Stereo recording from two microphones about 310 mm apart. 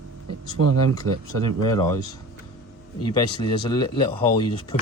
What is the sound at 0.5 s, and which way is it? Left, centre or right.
Speech, right.